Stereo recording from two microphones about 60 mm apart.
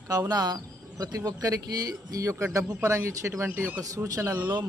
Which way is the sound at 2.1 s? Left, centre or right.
Right.